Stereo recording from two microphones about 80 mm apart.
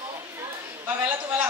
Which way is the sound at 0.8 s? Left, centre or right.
Right.